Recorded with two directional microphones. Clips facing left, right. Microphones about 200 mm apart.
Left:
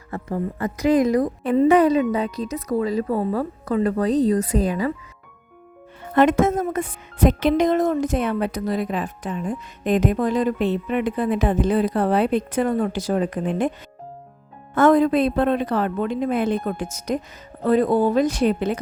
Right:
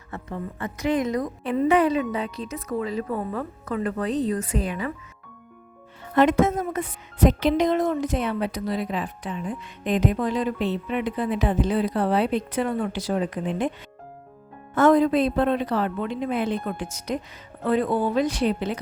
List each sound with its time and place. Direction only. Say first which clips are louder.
0.1 s a woman's voice: left 7 dB; 35° left (ahead or behind)
6.1 s speech: left 2 dB; 50° left (ahead or behind)
14.8 s speech: left 2 dB; 55° left (ahead or behind)